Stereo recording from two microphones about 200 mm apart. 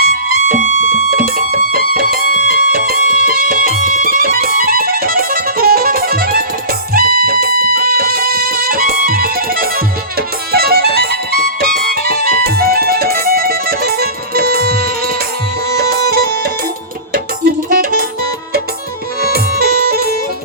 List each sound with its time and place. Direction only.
0.0 s music: 50° right (ahead or behind)
19.2 s music: 50° right (ahead or behind)